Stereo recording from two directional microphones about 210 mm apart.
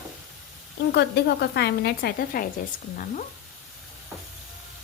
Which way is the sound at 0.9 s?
50° left (ahead or behind).